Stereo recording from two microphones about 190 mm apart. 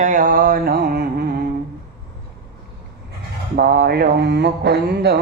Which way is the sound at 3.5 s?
55° right (ahead or behind).